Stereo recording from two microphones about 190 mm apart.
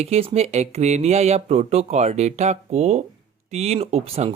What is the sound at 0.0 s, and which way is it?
Speech, 30° right (ahead or behind).